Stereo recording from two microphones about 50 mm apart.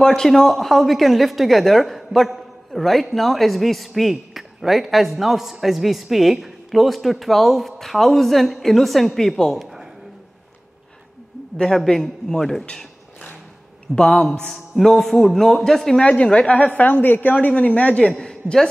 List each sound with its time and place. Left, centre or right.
0.0 s speech: centre
11.7 s a man's voice: centre
12.6 s a sound: left
13.9 s a man's voice: centre
16.0 s a woman's voice: centre
18.1 s a man's voice: centre